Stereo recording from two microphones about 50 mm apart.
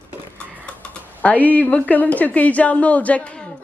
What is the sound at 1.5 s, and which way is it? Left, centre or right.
A woman's voice, left.